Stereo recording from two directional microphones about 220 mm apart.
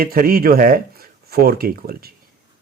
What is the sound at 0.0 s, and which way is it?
Speech, 40° right (ahead or behind).